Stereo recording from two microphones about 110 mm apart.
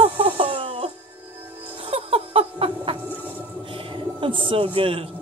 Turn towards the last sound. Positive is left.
turn(degrees=-55)  # may be behind; listen again after turning